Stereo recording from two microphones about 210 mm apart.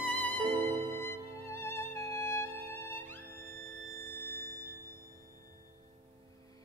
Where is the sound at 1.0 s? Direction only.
10° left (ahead or behind).